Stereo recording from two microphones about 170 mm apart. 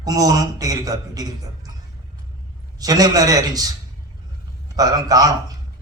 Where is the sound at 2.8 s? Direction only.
20° right (ahead or behind).